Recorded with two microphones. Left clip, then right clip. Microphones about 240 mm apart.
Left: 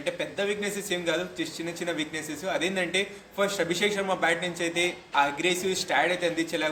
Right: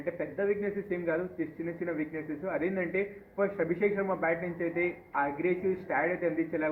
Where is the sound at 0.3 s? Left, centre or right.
Left.